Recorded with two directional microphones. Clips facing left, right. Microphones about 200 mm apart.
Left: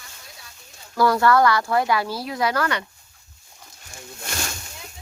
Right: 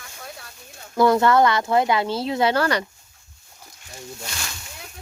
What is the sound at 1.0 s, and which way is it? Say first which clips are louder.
A woman's voice: right 1 dB; 20° right (ahead or behind).